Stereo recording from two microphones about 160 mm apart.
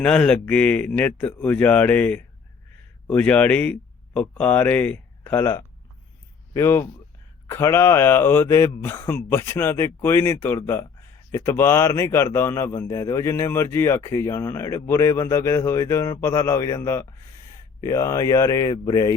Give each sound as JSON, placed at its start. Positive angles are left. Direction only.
{"t": 0.0, "sound": "a man's voice", "side_deg": 5}